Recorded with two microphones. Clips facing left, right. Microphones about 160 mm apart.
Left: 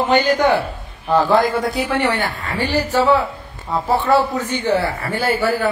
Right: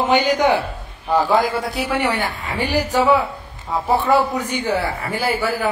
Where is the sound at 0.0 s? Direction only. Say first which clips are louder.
Left 1 dB; 15° right (ahead or behind).